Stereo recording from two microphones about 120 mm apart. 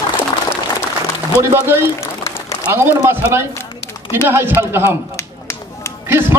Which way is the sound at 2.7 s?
20° right (ahead or behind).